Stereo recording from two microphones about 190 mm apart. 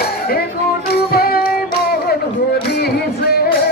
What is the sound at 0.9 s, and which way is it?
Music, 55° left (ahead or behind).